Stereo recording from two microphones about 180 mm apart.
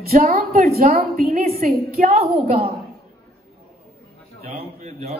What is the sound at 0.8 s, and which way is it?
Speech, 45° right (ahead or behind).